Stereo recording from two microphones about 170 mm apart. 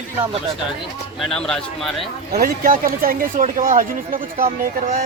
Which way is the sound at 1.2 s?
5° left (ahead or behind).